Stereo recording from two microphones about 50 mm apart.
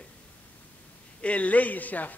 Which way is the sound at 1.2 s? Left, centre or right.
Left.